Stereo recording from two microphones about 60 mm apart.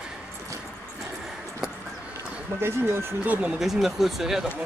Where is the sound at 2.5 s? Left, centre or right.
Right.